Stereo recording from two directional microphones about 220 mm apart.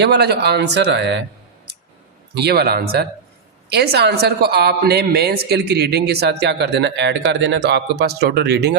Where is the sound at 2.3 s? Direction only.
45° right (ahead or behind).